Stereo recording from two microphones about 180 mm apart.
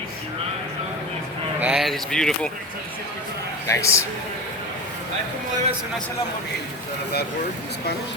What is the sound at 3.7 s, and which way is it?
Speech, 15° left (ahead or behind).